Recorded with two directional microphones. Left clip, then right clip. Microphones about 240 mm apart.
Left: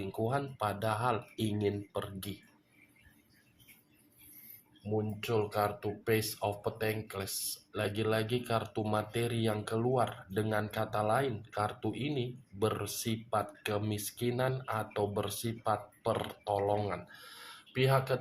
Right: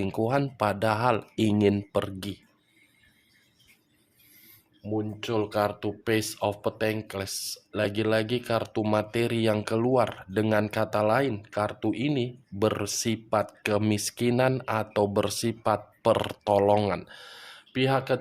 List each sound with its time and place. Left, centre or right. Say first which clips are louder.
0.0 s speech: right 8 dB; right
4.9 s speech: right 4 dB; right